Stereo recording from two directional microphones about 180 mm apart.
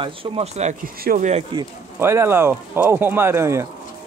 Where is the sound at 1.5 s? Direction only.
15° right (ahead or behind).